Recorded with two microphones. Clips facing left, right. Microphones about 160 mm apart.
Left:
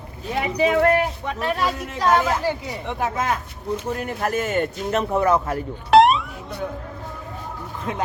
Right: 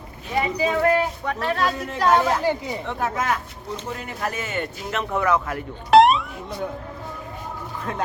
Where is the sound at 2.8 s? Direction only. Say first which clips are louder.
Left 2 dB; 20° left (ahead or behind).